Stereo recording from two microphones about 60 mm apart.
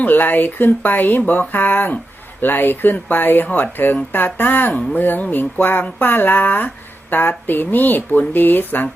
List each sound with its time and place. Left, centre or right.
0.0 s speech: left